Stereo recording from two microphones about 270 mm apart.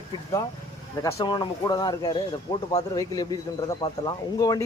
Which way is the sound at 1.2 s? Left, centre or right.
Centre.